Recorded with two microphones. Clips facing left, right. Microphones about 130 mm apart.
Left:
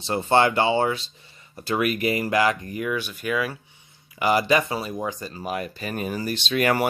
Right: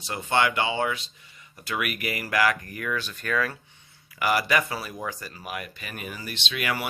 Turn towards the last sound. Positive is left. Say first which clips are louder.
# left 8 dB
turn(degrees=45)  # may be behind; listen again after turning